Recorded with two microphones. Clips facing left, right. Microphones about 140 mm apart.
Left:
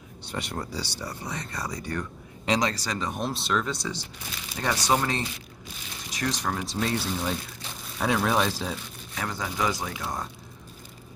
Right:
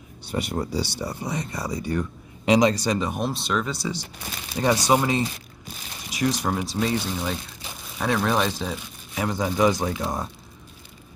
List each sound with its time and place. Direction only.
0.3 s speech: 10° right (ahead or behind)
3.1 s speech: centre (ahead or behind)
9.1 s speech: 15° right (ahead or behind)